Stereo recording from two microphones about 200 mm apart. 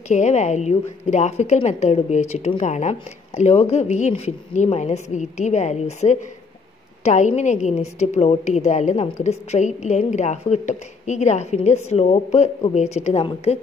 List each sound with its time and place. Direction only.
0.1 s a woman's voice: 35° left (ahead or behind)